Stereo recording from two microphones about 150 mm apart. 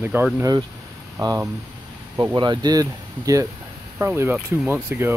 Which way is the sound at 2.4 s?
30° right (ahead or behind).